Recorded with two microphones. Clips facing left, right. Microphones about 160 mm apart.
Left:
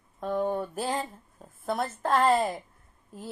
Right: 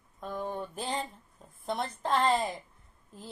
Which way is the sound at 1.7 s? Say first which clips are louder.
Left 3 dB; 5° left (ahead or behind).